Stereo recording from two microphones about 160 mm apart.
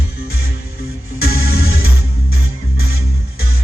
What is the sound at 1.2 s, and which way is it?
Music, 70° left (ahead or behind).